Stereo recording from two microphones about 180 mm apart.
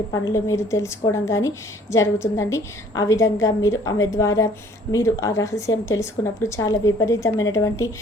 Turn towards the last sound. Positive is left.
turn(degrees=15)  # may be behind; listen again after turning